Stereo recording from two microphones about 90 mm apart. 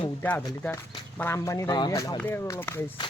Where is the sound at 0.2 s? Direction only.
20° left (ahead or behind).